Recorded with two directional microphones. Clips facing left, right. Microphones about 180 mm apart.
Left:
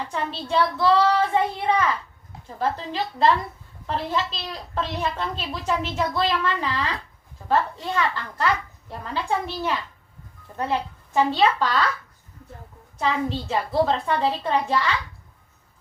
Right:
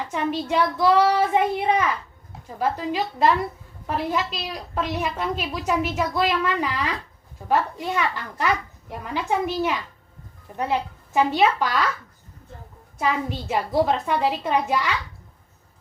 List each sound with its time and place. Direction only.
0.1 s a woman's voice: 15° right (ahead or behind)
13.0 s a woman's voice: 10° right (ahead or behind)